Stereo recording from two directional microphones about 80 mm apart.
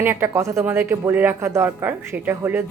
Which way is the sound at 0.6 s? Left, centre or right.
Right.